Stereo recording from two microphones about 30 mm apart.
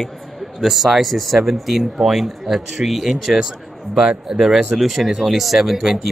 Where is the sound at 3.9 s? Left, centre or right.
Centre.